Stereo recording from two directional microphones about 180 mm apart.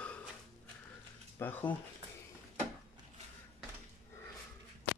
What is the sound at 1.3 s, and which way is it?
Speech, 10° left (ahead or behind).